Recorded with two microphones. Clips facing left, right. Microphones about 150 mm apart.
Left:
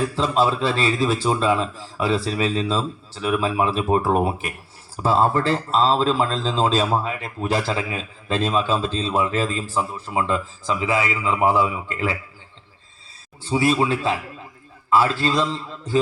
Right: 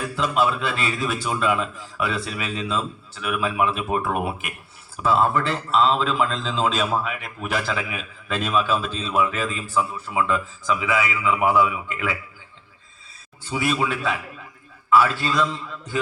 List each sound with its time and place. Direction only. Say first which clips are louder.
0.2 s a man's voice: left 1 dB; 30° left (ahead or behind)
13.4 s a man's voice: left 4 dB; 30° left (ahead or behind)